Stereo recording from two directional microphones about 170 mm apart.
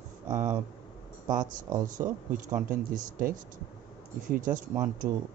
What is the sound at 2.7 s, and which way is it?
Speech, 55° right (ahead or behind).